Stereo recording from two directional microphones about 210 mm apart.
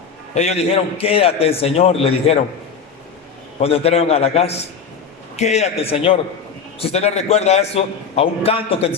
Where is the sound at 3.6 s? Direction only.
30° left (ahead or behind).